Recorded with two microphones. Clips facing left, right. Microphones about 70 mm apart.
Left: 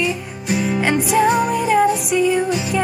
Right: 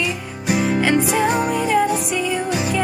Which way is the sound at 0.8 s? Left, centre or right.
Centre.